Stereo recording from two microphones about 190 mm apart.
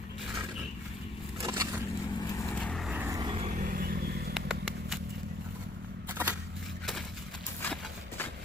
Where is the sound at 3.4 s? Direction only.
45° right (ahead or behind).